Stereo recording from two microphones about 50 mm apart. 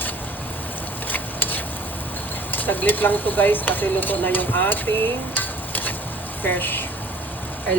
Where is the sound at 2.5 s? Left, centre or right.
Left.